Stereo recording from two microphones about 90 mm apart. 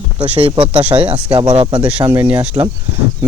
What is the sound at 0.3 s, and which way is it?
Speech, 85° right.